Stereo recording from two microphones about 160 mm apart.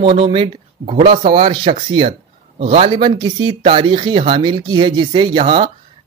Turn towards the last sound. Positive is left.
turn(degrees=-30)  # may be behind; listen again after turning